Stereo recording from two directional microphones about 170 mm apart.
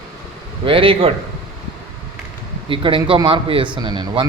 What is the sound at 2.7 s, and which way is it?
Speech, 30° right (ahead or behind).